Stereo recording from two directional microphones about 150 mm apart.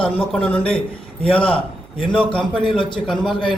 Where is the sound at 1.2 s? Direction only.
35° left (ahead or behind).